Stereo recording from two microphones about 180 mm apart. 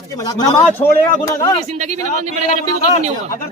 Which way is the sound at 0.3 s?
20° left (ahead or behind).